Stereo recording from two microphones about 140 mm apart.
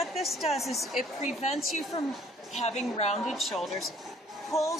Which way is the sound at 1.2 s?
55° left (ahead or behind).